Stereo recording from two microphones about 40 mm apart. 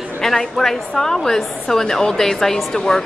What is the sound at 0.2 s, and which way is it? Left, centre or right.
A woman's voice, centre.